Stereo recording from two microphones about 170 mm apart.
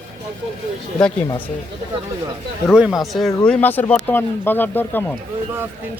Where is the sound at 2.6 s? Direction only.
5° right (ahead or behind).